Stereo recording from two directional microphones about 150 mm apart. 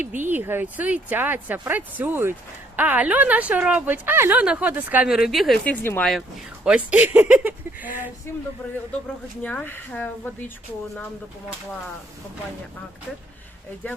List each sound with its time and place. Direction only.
0.2 s a woman's voice: 15° right (ahead or behind)
5.6 s speech: 10° left (ahead or behind)
6.7 s a woman's voice: 10° right (ahead or behind)
9.4 s speech: 10° left (ahead or behind)